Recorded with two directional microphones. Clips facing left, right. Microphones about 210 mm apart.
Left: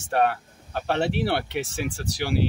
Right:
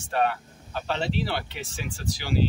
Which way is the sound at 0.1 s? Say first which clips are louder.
Left 3 dB; 55° left (ahead or behind).